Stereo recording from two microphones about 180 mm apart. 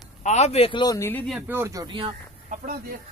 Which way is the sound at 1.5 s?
15° right (ahead or behind).